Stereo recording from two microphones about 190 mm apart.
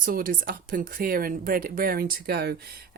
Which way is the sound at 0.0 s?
50° right (ahead or behind).